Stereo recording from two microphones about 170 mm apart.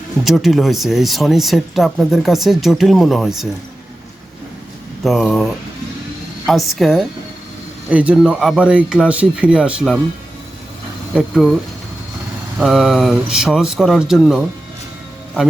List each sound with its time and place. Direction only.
0.3 s speech: centre (ahead or behind)
5.0 s speech: centre (ahead or behind)
11.1 s speech: centre (ahead or behind)
12.5 s speech: centre (ahead or behind)